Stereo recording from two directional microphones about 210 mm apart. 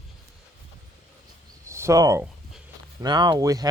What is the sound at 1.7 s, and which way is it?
Speech, 15° right (ahead or behind).